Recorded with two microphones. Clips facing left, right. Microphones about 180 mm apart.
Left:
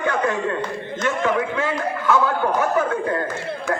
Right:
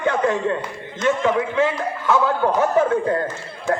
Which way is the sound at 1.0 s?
20° right (ahead or behind).